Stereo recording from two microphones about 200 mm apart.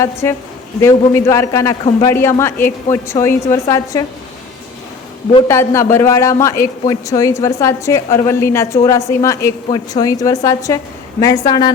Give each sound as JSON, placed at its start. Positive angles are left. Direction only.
{"t": 0.0, "sound": "a man's voice", "side_deg": 15}
{"t": 2.4, "sound": "a man's voice", "side_deg": 10}
{"t": 5.5, "sound": "a man's voice", "side_deg": 15}